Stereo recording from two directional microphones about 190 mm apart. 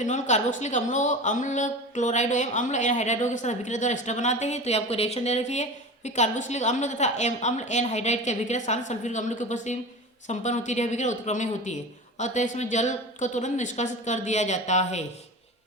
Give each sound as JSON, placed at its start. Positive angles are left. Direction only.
{"t": 0.0, "sound": "speech", "side_deg": 40}